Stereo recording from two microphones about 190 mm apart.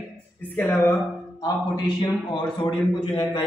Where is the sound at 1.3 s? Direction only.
20° left (ahead or behind).